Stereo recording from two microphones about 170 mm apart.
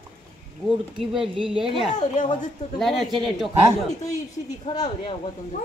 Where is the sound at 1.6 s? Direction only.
40° left (ahead or behind).